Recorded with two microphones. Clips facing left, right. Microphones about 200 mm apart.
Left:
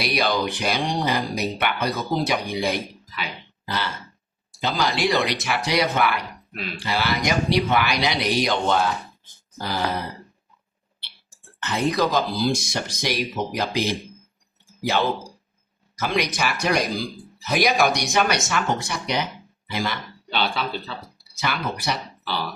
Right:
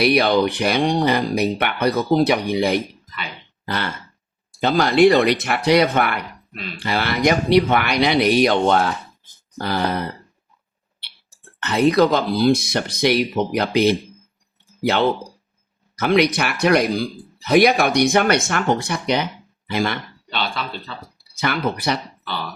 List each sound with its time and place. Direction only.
0.0 s speech: 55° right (ahead or behind)
11.6 s speech: 60° right (ahead or behind)
20.3 s speech: centre (ahead or behind)
21.3 s speech: 55° right (ahead or behind)